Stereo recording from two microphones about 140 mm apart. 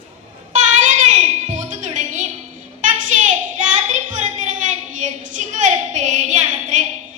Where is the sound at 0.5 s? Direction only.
60° right (ahead or behind).